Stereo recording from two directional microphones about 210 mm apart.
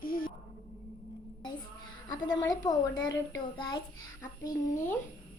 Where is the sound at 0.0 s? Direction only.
40° left (ahead or behind).